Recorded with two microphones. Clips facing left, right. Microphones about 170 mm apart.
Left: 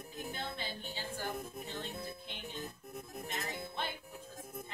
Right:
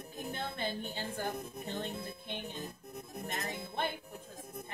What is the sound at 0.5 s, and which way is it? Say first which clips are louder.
Speech: right 5 dB; 55° right (ahead or behind).